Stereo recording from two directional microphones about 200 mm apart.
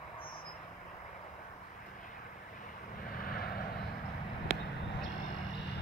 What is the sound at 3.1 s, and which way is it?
Vehicle, 50° left (ahead or behind).